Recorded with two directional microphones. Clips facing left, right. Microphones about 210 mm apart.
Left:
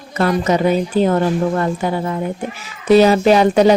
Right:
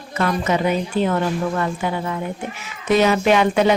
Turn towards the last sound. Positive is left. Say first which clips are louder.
# left 5 dB
turn(degrees=35)  # may be behind; listen again after turning